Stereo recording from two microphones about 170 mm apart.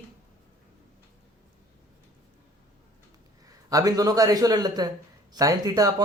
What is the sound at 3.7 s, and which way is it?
Speech, 20° right (ahead or behind).